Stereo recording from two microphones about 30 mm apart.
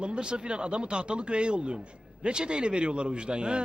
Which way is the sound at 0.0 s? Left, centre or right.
Right.